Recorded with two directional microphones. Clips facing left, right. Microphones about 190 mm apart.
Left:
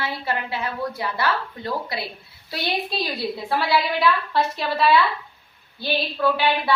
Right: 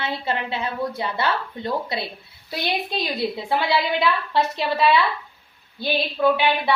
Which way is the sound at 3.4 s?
20° right (ahead or behind).